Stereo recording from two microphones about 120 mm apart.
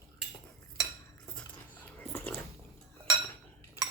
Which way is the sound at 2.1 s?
15° left (ahead or behind).